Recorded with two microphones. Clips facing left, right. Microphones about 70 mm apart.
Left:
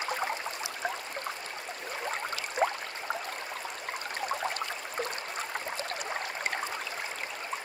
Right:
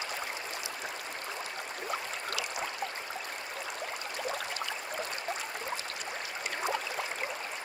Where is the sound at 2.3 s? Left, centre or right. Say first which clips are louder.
Left 7 dB; left.